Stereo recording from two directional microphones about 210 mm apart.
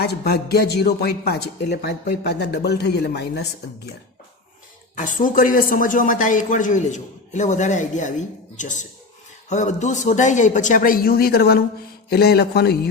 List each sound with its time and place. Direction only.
0.0 s speech: 50° left (ahead or behind)
4.9 s speech: 40° left (ahead or behind)